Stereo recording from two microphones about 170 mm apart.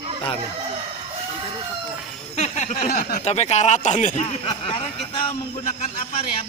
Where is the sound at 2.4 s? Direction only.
40° left (ahead or behind).